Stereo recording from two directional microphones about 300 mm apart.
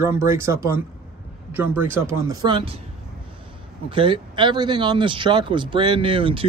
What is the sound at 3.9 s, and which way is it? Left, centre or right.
Speech, centre.